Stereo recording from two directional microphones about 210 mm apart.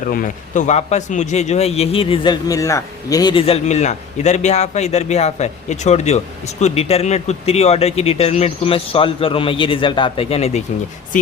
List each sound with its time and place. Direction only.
0.0 s a man's voice: 40° left (ahead or behind)